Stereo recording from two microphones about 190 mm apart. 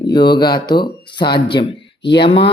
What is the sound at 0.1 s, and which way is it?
Speech, 25° left (ahead or behind).